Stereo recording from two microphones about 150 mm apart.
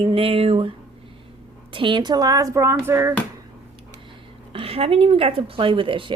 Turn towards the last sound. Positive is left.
turn(degrees=-35)  # may be behind; listen again after turning